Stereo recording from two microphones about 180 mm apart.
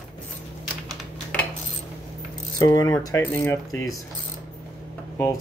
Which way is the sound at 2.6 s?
20° left (ahead or behind).